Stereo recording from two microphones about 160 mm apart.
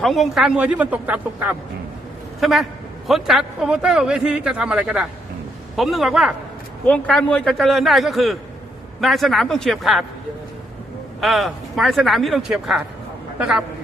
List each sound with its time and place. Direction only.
0.0 s a man's voice: centre (ahead or behind)
6.8 s a man's voice: 5° left (ahead or behind)
11.2 s a man's voice: centre (ahead or behind)